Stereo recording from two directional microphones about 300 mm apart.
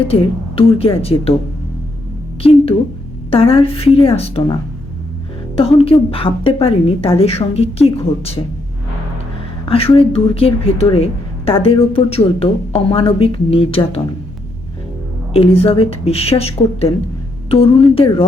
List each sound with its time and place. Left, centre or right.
0.0 s a woman's voice: centre
2.4 s a woman's voice: centre
9.6 s a woman's voice: centre
15.3 s a woman's voice: centre